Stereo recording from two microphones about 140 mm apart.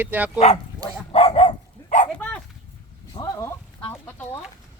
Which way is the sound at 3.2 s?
20° left (ahead or behind).